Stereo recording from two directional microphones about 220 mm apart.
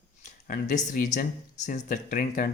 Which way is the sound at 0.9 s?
35° left (ahead or behind).